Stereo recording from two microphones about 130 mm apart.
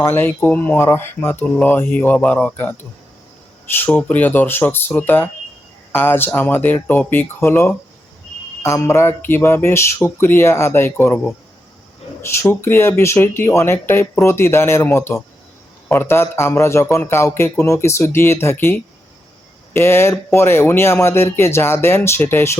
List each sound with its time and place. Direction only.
0.0 s speech: 15° left (ahead or behind)